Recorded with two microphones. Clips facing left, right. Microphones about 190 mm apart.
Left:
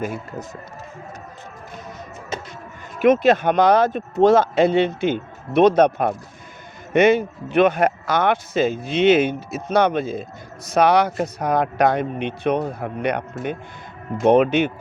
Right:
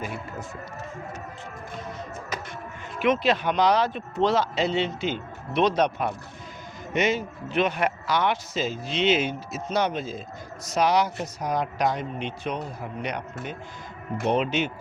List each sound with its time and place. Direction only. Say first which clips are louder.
0.0 s speech: left 6 dB; 45° left (ahead or behind)
2.3 s music: left 5 dB; 25° left (ahead or behind)
3.0 s speech: left 7 dB; 45° left (ahead or behind)